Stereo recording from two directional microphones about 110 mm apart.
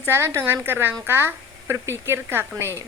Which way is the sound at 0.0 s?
20° right (ahead or behind).